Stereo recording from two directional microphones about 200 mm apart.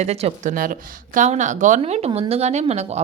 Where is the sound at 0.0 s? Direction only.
30° right (ahead or behind).